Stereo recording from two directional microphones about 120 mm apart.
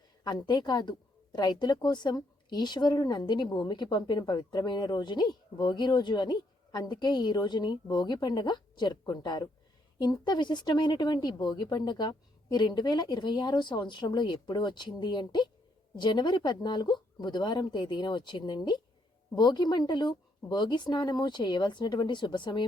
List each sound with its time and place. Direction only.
0.3 s a woman's voice: 35° left (ahead or behind)